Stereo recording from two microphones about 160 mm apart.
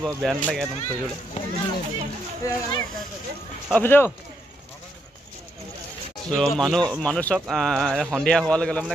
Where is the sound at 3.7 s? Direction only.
10° left (ahead or behind).